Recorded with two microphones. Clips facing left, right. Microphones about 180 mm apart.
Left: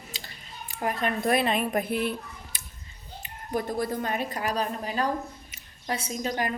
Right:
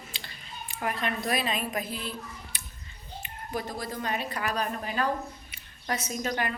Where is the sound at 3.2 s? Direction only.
45° left (ahead or behind).